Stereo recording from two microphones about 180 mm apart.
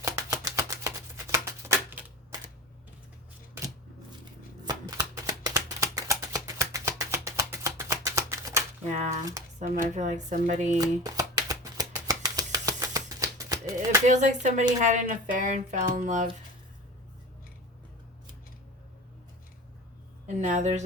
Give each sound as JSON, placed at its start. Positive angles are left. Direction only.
{"t": 0.0, "sound": "a sound", "side_deg": -15}
{"t": 4.6, "sound": "shuffling cards", "side_deg": -20}
{"t": 9.0, "sound": "speech", "side_deg": -15}
{"t": 9.9, "sound": "speech", "side_deg": -40}
{"t": 10.8, "sound": "shuffling cards", "side_deg": -20}
{"t": 14.1, "sound": "speech", "side_deg": -45}
{"t": 20.2, "sound": "a woman's voice", "side_deg": -40}